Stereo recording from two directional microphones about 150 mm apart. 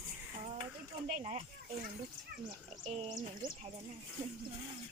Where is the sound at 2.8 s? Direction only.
55° right (ahead or behind).